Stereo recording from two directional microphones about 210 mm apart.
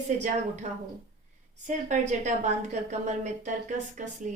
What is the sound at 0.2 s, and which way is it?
A woman's voice, 35° right (ahead or behind).